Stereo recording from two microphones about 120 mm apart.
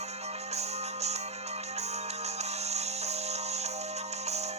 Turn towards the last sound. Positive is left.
turn(degrees=-65)  # may be behind; listen again after turning